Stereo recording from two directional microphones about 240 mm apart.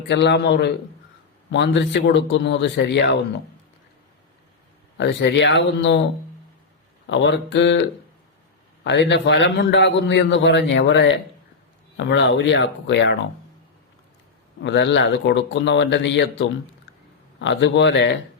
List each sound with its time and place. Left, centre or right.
0.1 s a man's voice: left
4.9 s a man's voice: left
7.1 s a man's voice: left
8.8 s a man's voice: left
14.6 s a man's voice: left